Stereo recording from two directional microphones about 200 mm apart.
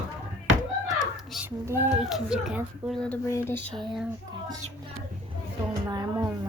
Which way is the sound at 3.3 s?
15° left (ahead or behind).